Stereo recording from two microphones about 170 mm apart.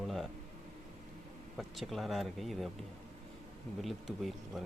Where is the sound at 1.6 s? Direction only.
Centre (ahead or behind).